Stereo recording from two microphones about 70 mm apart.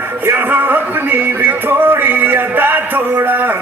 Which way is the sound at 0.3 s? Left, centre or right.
Right.